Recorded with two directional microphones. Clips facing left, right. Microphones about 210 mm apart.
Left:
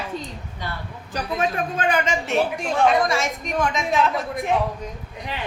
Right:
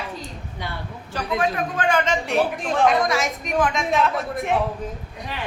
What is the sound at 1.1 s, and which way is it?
Speech, 25° left (ahead or behind).